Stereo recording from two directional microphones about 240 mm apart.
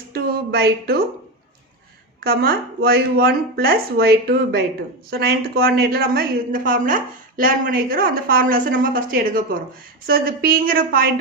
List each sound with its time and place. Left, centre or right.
0.1 s speech: right
2.2 s a woman's voice: right